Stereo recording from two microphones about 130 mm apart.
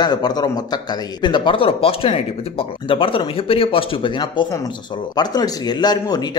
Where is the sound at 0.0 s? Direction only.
30° left (ahead or behind).